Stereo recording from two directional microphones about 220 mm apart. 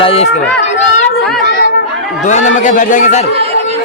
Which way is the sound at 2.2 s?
35° left (ahead or behind).